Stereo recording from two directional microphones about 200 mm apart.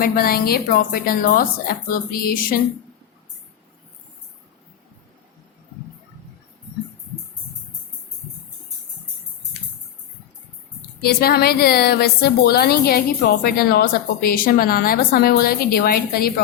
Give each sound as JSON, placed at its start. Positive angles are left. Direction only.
{"t": 0.0, "sound": "a woman's voice", "side_deg": 50}
{"t": 11.0, "sound": "a woman's voice", "side_deg": 50}